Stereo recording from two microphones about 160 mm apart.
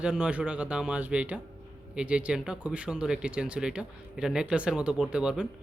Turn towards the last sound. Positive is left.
turn(degrees=-5)  # may be behind; listen again after turning